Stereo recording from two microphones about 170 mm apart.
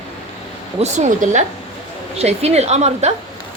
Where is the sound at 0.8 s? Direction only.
40° right (ahead or behind).